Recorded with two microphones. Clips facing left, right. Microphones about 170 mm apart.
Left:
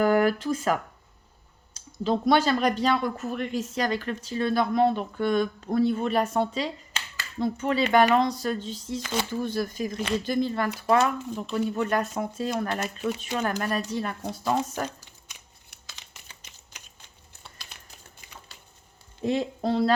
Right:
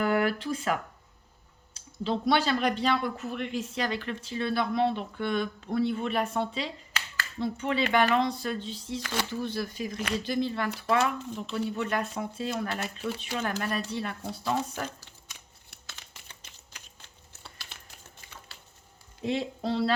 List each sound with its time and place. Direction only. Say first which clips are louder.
0.0 s speech: left 5 dB; 40° left (ahead or behind)
9.0 s speech: left 3 dB; 20° left (ahead or behind)
9.3 s speech: left 4 dB; 45° left (ahead or behind)
16.0 s typewriter: even; 15° left (ahead or behind)
19.2 s speech: left 4 dB; 45° left (ahead or behind)